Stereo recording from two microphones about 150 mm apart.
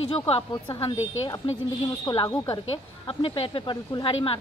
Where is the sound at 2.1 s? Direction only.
30° left (ahead or behind).